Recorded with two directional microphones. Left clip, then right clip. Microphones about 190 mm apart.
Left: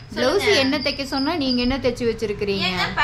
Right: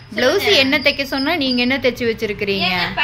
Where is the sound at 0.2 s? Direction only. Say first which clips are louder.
Right 4 dB; 5° right (ahead or behind).